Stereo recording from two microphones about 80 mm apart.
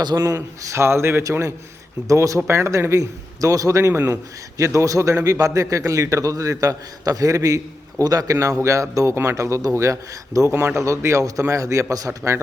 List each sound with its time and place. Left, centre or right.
0.1 s a man's voice: right
10.5 s speech: right
10.8 s speech: right